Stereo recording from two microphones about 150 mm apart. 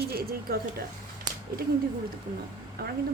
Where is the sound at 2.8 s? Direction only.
90° right.